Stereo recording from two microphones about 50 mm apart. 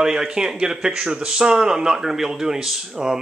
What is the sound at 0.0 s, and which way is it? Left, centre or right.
Speech, centre.